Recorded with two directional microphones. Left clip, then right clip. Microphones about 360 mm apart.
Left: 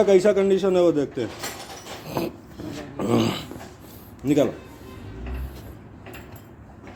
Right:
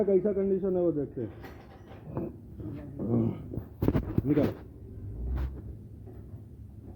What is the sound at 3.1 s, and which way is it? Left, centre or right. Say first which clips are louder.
Speech: left 9 dB; left.